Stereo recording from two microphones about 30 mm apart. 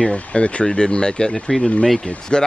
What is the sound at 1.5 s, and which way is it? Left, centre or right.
Speech, centre.